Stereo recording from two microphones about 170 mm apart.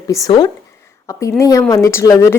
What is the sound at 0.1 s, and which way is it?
A woman's voice, 25° left (ahead or behind).